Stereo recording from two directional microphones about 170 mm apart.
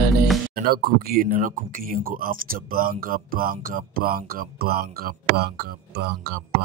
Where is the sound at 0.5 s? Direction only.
65° right (ahead or behind).